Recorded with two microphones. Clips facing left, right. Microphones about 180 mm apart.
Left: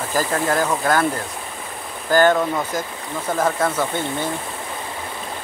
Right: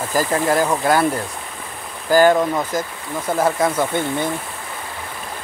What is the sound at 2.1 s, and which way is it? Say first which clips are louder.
Speech: right 2 dB; 10° right (ahead or behind).